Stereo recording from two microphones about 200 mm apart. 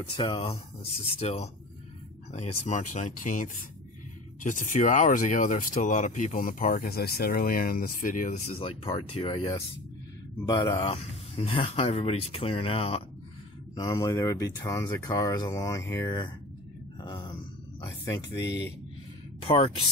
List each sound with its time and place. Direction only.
0.2 s speech: 25° left (ahead or behind)
13.7 s speech: 20° left (ahead or behind)
17.0 s a sound: 20° left (ahead or behind)
19.4 s speech: 25° left (ahead or behind)